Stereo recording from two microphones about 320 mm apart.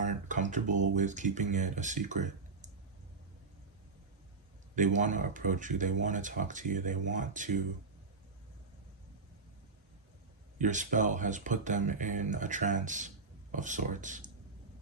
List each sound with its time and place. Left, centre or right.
0.0 s speech: right
4.7 s speech: right
10.6 s speech: right